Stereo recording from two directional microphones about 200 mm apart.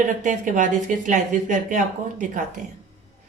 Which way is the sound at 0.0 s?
40° right (ahead or behind).